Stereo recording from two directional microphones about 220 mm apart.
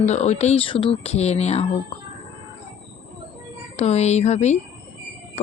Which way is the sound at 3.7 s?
30° left (ahead or behind).